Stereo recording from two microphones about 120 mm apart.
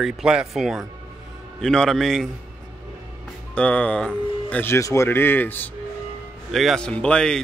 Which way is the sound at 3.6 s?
10° left (ahead or behind).